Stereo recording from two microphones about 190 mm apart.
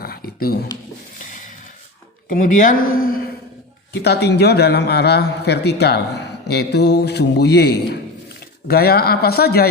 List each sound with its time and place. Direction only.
0.0 s a sound: 50° left (ahead or behind)
2.3 s speech: 45° left (ahead or behind)
4.0 s a man's voice: 60° left (ahead or behind)